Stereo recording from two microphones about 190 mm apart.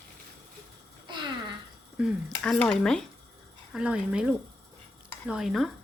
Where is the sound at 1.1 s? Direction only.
25° right (ahead or behind).